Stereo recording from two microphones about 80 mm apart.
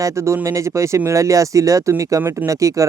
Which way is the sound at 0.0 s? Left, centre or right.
Right.